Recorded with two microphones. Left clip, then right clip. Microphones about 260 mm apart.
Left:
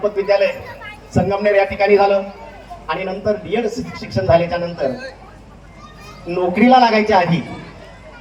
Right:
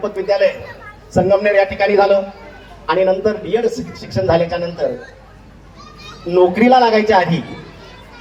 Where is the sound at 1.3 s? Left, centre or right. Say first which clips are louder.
Right 2 dB; right.